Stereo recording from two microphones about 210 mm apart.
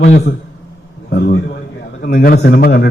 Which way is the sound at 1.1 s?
50° left (ahead or behind).